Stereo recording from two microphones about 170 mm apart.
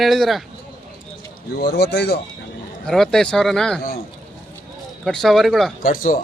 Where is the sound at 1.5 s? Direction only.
80° left.